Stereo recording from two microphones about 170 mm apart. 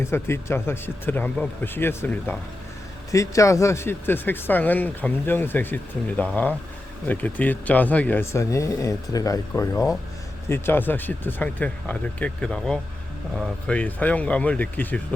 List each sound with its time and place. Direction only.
0.0 s speech: 15° left (ahead or behind)